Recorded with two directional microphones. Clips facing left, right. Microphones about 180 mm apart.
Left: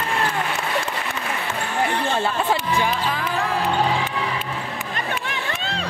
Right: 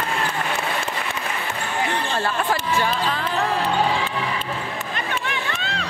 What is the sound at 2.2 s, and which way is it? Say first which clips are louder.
Speech: left 1 dB; 15° left (ahead or behind).